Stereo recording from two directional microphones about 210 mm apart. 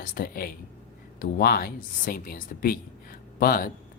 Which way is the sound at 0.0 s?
45° left (ahead or behind).